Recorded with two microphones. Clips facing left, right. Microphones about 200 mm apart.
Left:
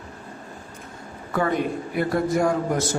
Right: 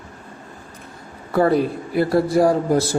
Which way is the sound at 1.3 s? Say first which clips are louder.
Right 6 dB; 35° right (ahead or behind).